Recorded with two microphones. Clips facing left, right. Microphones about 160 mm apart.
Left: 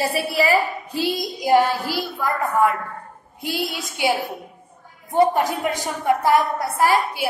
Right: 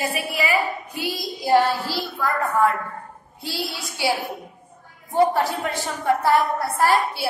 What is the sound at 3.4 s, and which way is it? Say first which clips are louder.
A woman's voice: left 4 dB; 20° left (ahead or behind).